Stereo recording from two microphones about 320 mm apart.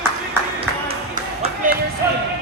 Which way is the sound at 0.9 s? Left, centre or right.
Right.